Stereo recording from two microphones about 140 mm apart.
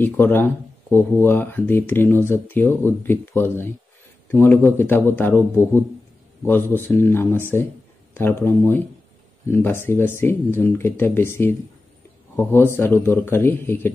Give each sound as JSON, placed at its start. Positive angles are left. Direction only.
{"t": 0.0, "sound": "speech", "side_deg": 15}